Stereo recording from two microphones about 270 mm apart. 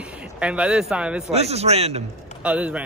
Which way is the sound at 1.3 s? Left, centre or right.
Right.